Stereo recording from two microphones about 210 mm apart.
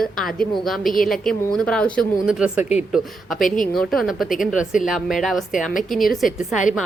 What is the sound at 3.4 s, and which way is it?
Speech, 40° left (ahead or behind).